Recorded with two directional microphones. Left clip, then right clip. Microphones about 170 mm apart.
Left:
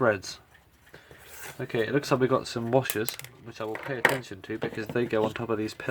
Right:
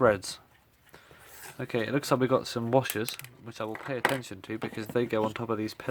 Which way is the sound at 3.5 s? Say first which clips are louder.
Left 1 dB; 50° right (ahead or behind).